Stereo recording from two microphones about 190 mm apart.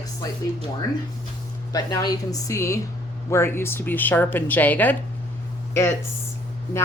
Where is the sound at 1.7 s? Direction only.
20° left (ahead or behind).